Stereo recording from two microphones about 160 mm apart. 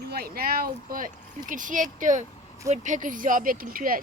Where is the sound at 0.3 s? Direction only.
65° right (ahead or behind).